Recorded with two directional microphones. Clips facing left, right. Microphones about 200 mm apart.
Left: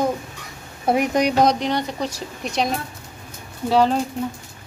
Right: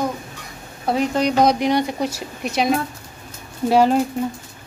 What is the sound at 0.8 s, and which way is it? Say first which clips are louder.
Speech: left 1 dB; 20° left (ahead or behind).